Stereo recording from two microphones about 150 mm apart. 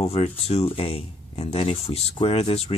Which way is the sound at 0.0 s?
40° left (ahead or behind).